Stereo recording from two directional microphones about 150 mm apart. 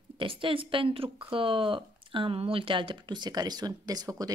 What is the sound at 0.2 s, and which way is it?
Speech, 35° right (ahead or behind).